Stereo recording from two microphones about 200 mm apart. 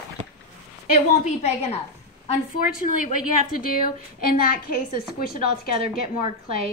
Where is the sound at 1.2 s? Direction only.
35° left (ahead or behind).